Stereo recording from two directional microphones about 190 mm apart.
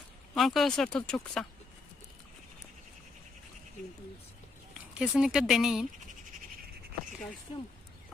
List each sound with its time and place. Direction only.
0.3 s speech: centre (ahead or behind)
4.9 s speech: 5° right (ahead or behind)
7.5 s speech: 30° left (ahead or behind)